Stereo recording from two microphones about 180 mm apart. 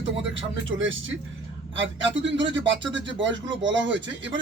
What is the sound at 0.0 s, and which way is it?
A man's voice, 90° right.